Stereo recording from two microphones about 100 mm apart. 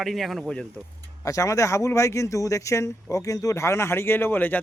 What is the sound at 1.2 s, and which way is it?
Speech, 35° left (ahead or behind).